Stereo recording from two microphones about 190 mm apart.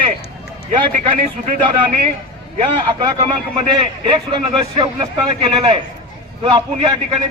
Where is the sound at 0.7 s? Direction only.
40° right (ahead or behind).